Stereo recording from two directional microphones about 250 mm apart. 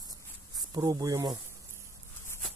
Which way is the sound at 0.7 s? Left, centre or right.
Centre.